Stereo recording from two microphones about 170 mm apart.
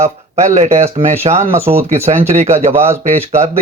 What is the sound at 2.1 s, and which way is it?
Speech, 45° right (ahead or behind).